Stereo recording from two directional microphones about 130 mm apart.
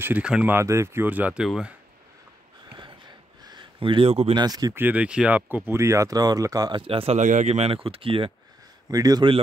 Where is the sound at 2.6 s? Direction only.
35° right (ahead or behind).